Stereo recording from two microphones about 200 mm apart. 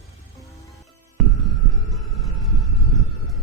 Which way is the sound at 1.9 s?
Centre (ahead or behind).